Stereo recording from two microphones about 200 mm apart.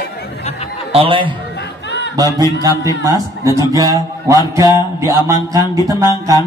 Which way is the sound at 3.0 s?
15° right (ahead or behind).